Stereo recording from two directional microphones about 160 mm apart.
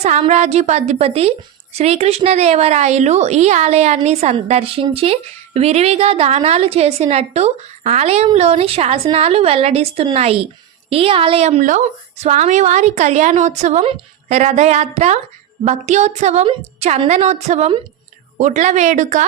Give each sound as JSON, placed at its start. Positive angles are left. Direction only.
{"t": 0.0, "sound": "a woman's voice", "side_deg": -45}